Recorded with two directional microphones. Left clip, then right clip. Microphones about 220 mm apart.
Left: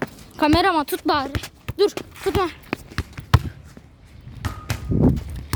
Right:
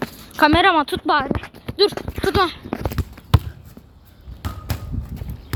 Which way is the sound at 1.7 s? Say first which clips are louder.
Right 2 dB; 15° left (ahead or behind).